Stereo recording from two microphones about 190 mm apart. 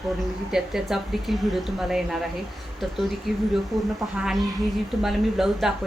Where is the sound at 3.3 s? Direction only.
Centre (ahead or behind).